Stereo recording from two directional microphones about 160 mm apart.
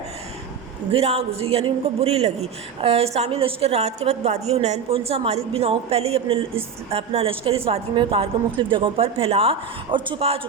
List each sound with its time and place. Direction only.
0.9 s a man's voice: 40° right (ahead or behind)